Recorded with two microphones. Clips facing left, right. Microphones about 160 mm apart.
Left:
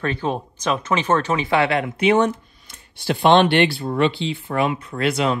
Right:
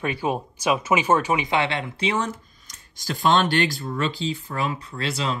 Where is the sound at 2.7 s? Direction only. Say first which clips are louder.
Left 7 dB; 40° right (ahead or behind).